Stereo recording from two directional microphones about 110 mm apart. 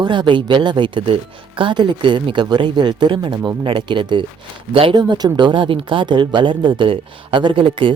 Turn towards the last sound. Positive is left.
turn(degrees=-50)  # may be behind; listen again after turning